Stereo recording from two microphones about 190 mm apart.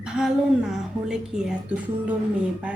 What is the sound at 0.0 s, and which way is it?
A woman's voice, 5° right (ahead or behind).